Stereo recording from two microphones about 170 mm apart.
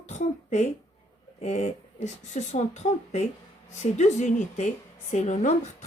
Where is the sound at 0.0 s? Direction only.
45° left (ahead or behind).